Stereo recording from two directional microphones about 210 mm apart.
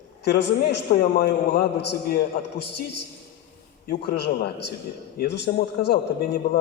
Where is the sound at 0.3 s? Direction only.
55° left (ahead or behind).